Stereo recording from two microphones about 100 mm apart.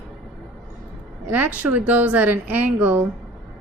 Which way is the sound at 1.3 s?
15° right (ahead or behind).